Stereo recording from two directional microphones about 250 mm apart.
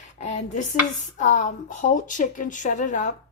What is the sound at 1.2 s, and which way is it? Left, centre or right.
Speech, left.